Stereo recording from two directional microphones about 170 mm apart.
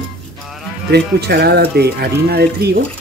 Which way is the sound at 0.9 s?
70° right (ahead or behind).